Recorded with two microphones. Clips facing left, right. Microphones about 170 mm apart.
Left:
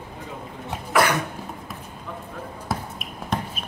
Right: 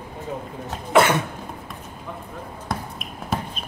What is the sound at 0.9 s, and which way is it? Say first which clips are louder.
Cough: right 4 dB; 25° right (ahead or behind).